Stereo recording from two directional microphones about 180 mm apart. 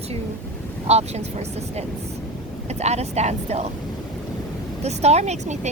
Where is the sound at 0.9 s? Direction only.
35° right (ahead or behind).